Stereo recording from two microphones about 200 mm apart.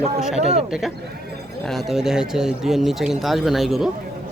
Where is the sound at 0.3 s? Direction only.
30° right (ahead or behind).